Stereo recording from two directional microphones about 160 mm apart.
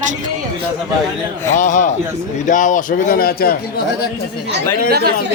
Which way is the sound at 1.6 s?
50° left (ahead or behind).